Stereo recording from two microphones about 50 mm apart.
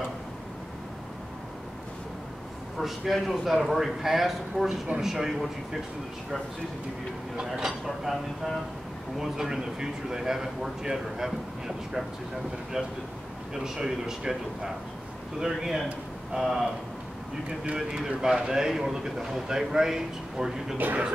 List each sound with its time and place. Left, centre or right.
2.8 s a man's voice: centre
7.3 s a man's voice: centre
9.2 s a man's voice: centre
17.6 s a man's voice: centre
20.7 s speech: right